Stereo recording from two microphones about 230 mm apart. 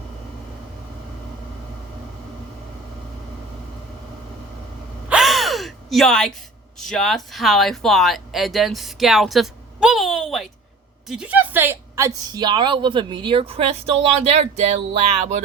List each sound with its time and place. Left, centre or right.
5.0 s gasp: centre
6.7 s a woman's voice: centre; by 14.8 s right